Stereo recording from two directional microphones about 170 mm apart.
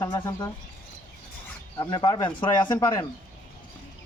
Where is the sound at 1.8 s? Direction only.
25° left (ahead or behind).